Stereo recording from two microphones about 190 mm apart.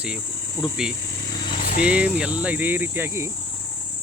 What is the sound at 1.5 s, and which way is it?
Vehicle, 45° left (ahead or behind).